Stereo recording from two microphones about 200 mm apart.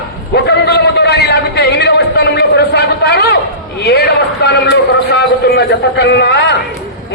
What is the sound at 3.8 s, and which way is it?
A man's voice, 55° left (ahead or behind).